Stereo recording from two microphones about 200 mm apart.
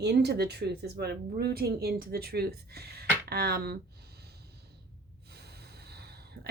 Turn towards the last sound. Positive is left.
turn(degrees=-55)  # may be behind; listen again after turning